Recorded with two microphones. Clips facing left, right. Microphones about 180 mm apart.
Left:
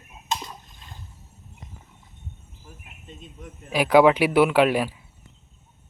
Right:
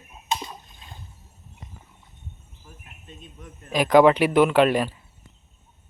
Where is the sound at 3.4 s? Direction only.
10° left (ahead or behind).